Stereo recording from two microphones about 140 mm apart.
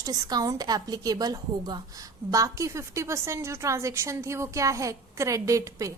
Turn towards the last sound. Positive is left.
turn(degrees=-20)  # may be behind; listen again after turning